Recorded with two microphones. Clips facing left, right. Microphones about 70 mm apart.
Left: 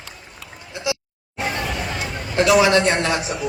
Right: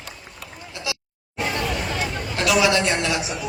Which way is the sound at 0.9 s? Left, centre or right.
Left.